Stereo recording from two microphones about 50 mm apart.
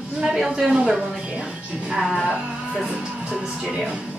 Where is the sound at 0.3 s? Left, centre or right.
Centre.